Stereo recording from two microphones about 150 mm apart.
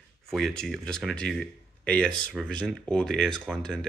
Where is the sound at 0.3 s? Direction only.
Centre (ahead or behind).